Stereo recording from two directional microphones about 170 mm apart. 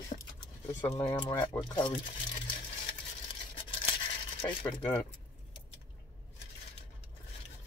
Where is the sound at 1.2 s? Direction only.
25° left (ahead or behind).